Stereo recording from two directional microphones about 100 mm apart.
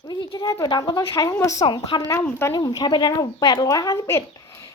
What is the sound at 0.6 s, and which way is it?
Speech, 45° left (ahead or behind).